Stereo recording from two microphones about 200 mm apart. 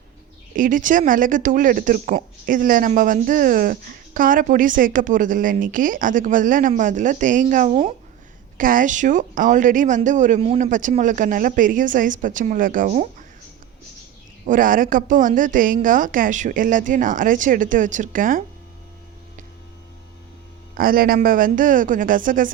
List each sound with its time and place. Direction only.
0.5 s speech: 40° right (ahead or behind)
14.4 s speech: 40° right (ahead or behind)
20.7 s a woman's voice: 45° right (ahead or behind)